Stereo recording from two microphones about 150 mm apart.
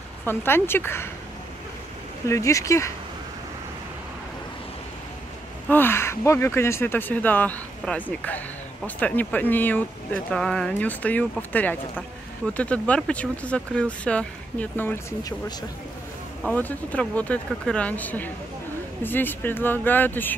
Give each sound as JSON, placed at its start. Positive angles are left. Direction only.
{"t": 0.2, "sound": "speech", "side_deg": 15}
{"t": 2.2, "sound": "speech", "side_deg": 20}
{"t": 5.7, "sound": "speech", "side_deg": 15}
{"t": 16.4, "sound": "speech", "side_deg": 10}